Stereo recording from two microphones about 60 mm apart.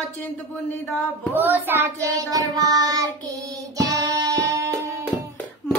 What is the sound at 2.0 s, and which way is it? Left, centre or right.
Child singing, right.